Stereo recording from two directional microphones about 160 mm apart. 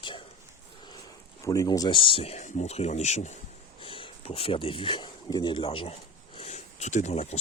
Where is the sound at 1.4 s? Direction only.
20° left (ahead or behind); by 3.3 s 45° left (ahead or behind).